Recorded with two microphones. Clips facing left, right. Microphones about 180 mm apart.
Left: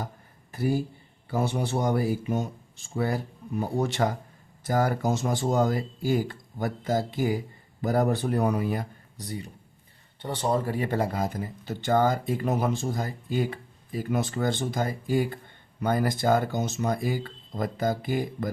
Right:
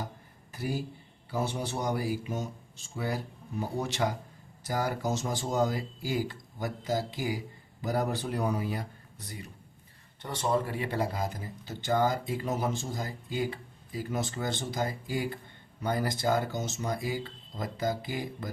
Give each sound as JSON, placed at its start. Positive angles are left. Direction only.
{"t": 0.5, "sound": "speech", "side_deg": 55}
{"t": 9.1, "sound": "speech", "side_deg": 35}